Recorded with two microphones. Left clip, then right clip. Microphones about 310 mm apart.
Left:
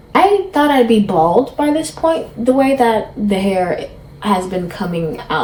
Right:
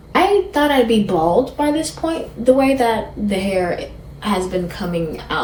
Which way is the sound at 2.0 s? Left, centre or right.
Left.